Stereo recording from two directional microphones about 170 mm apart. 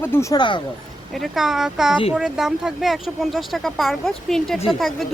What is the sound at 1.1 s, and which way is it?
Speech, centre (ahead or behind).